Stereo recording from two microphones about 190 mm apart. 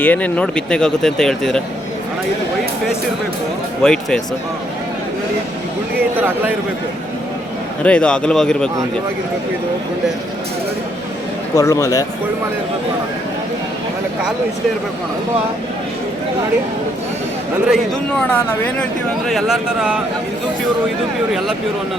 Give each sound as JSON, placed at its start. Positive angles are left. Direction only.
{"t": 0.0, "sound": "speech", "side_deg": 10}
{"t": 3.8, "sound": "speech", "side_deg": 5}
{"t": 6.1, "sound": "a man's voice", "side_deg": -10}
{"t": 7.9, "sound": "speech", "side_deg": 5}
{"t": 11.5, "sound": "speech", "side_deg": 15}
{"t": 18.3, "sound": "speech", "side_deg": 10}
{"t": 19.3, "sound": "speech", "side_deg": 0}